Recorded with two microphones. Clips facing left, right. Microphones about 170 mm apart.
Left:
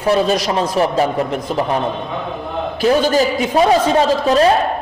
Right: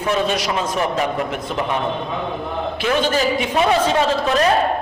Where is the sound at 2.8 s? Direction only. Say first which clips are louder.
Left 6 dB; 40° left (ahead or behind).